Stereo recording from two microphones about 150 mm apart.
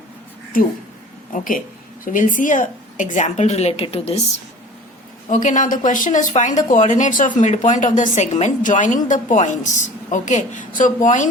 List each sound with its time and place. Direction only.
1.3 s speech: 65° left (ahead or behind); by 4.2 s 40° left (ahead or behind)
5.3 s speech: 55° left (ahead or behind)